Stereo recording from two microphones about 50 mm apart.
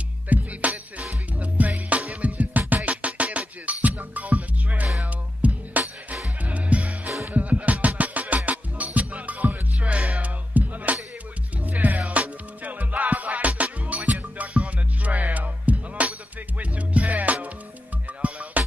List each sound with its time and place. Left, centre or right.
0.3 s music: right